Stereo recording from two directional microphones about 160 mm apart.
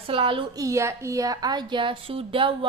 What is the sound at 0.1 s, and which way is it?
A woman's voice, 35° right (ahead or behind).